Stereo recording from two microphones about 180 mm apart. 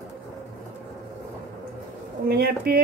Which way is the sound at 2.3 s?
55° right (ahead or behind).